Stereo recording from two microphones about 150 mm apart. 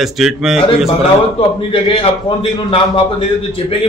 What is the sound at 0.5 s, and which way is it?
A man's voice, 40° left (ahead or behind).